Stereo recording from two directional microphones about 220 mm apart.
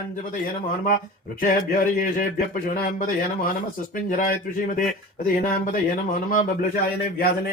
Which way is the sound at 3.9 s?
40° left (ahead or behind).